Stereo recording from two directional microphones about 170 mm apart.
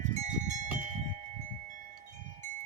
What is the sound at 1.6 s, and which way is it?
Chime, 50° right (ahead or behind).